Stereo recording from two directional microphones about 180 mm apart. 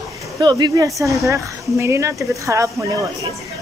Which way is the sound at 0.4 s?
25° right (ahead or behind).